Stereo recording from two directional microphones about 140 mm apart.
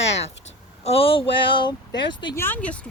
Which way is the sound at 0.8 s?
45° left (ahead or behind).